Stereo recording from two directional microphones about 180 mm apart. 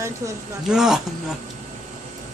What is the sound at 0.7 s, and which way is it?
Speech, 5° right (ahead or behind).